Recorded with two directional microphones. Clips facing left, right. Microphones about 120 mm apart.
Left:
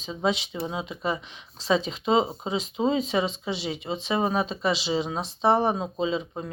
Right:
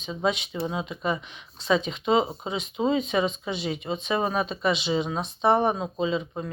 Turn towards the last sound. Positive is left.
turn(degrees=25)  # may be behind; listen again after turning